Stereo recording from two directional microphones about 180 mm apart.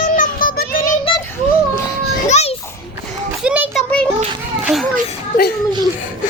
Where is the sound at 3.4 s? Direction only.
5° right (ahead or behind).